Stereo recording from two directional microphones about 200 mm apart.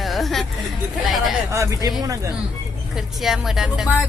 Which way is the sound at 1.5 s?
15° right (ahead or behind).